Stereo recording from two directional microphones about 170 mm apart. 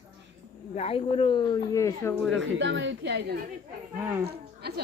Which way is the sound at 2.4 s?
90° right.